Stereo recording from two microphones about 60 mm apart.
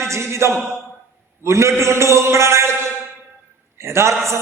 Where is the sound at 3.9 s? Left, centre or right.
Right.